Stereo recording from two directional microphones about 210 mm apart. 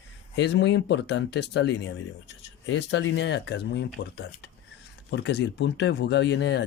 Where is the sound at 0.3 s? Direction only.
55° left (ahead or behind).